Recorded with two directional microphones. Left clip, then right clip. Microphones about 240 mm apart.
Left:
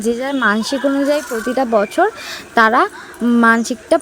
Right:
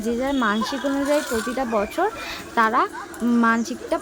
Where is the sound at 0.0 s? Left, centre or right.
Left.